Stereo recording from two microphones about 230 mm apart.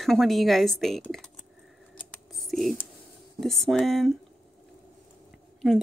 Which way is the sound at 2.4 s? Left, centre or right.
Centre.